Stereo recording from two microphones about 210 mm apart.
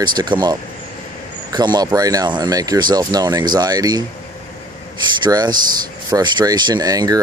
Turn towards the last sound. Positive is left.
turn(degrees=-15)  # may be behind; listen again after turning